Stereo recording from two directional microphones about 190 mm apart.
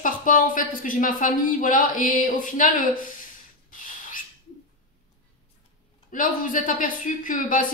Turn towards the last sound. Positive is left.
turn(degrees=45)  # may be behind; listen again after turning